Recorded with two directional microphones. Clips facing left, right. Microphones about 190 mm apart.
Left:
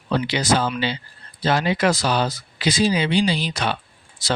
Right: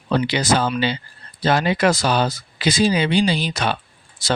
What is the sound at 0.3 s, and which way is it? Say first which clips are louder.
Speech: right 1 dB; 55° right (ahead or behind).